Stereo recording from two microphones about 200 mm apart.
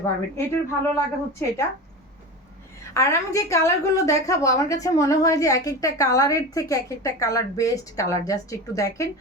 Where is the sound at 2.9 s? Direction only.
15° left (ahead or behind).